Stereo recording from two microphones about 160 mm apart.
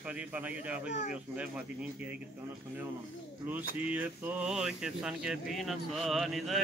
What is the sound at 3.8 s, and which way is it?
Speech, 10° right (ahead or behind).